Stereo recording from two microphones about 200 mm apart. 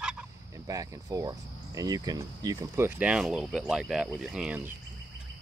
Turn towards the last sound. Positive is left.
turn(degrees=-5)  # may be behind; listen again after turning